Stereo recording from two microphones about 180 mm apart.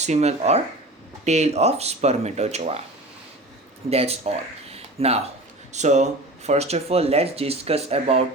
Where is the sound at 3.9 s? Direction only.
35° right (ahead or behind).